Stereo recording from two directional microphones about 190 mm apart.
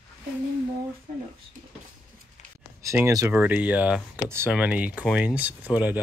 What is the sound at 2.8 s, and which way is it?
Speech, 15° right (ahead or behind).